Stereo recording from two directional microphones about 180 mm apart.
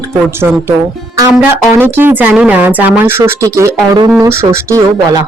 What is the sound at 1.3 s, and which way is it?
Speech, centre (ahead or behind).